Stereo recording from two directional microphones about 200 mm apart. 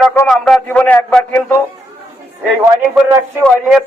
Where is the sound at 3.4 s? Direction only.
Centre (ahead or behind).